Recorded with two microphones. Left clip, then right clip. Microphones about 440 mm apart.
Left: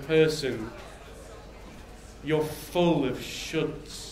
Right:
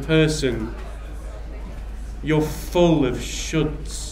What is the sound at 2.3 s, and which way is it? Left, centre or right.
A man's voice, right.